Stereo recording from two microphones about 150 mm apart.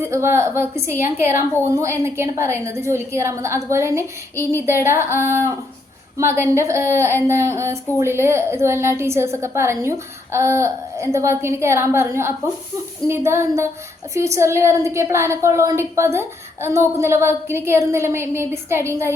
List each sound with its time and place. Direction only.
0.0 s a woman's voice: 15° right (ahead or behind)